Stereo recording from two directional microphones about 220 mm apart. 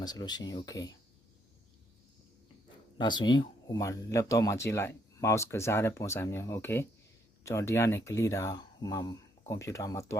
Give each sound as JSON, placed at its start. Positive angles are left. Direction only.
{"t": 0.0, "sound": "speech", "side_deg": 20}
{"t": 3.0, "sound": "speech", "side_deg": 20}